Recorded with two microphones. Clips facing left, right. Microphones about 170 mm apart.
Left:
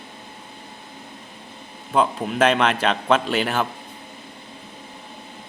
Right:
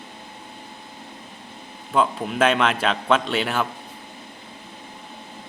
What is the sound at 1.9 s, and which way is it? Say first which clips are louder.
A man's voice: left 1 dB; centre (ahead or behind).